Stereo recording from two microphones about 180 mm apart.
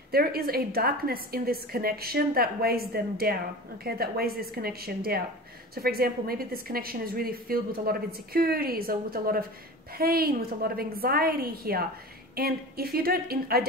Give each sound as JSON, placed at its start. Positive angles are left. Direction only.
{"t": 0.1, "sound": "a woman's voice", "side_deg": -60}